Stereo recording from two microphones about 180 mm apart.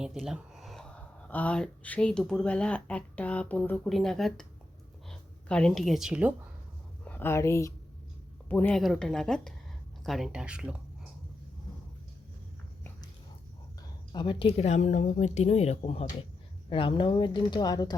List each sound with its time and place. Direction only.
0.0 s speech: 5° right (ahead or behind)
7.0 s speech: 10° left (ahead or behind); by 10.8 s 5° right (ahead or behind)
14.1 s speech: 25° left (ahead or behind)